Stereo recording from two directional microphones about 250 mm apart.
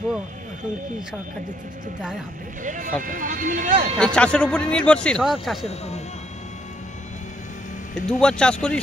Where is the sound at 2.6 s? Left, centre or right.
Right.